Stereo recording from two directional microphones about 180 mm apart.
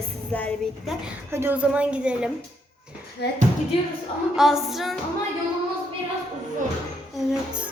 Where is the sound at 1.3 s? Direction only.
10° right (ahead or behind).